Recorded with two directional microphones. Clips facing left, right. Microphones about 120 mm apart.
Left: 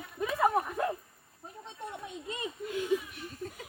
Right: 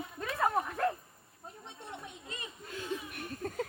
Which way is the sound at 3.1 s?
55° right (ahead or behind).